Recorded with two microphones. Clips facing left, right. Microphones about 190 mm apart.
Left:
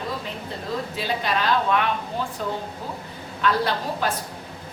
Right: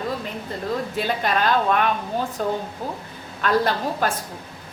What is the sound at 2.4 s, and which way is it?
A woman's voice, 45° right (ahead or behind).